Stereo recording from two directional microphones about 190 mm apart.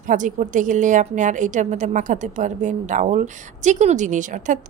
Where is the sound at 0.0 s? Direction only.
40° right (ahead or behind).